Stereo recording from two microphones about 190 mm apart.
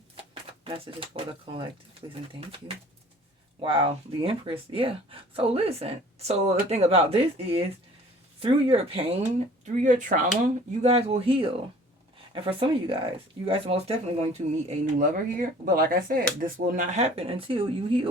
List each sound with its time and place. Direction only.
0.2 s speech: 30° right (ahead or behind)
3.6 s speech: 25° right (ahead or behind)
9.8 s speech: 40° right (ahead or behind)
14.9 s speech: 45° right (ahead or behind); by 18.1 s 30° right (ahead or behind)